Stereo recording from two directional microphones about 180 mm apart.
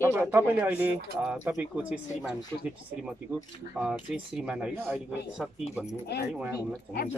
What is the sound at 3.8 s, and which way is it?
Speech, 5° right (ahead or behind).